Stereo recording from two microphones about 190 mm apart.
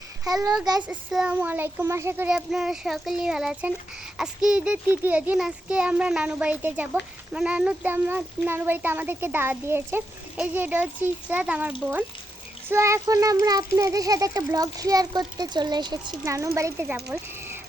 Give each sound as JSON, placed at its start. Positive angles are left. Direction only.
{"t": 0.8, "sound": "a child's voice", "side_deg": -5}
{"t": 12.7, "sound": "a child's voice", "side_deg": -15}